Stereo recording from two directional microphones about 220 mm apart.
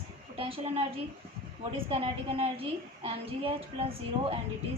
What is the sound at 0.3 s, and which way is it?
A woman's voice, 25° right (ahead or behind).